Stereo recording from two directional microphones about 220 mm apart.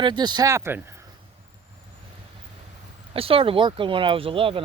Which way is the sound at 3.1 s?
25° right (ahead or behind).